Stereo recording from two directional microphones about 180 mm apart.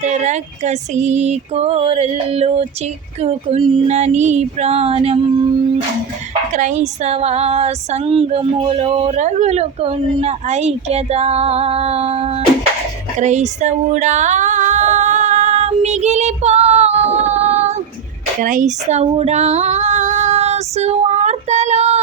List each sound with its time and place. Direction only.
0.0 s female singing: 40° right (ahead or behind)
6.5 s female singing: 45° right (ahead or behind)